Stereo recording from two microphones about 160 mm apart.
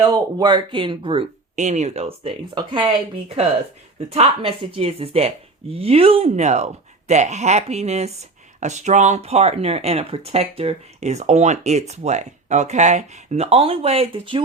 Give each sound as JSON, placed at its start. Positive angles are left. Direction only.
{"t": 0.0, "sound": "speech", "side_deg": -25}
{"t": 1.5, "sound": "speech", "side_deg": -45}